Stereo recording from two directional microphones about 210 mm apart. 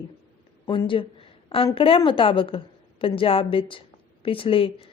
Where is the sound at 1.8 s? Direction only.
25° left (ahead or behind).